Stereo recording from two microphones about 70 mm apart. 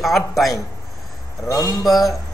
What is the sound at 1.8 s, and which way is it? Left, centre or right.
Speech, centre.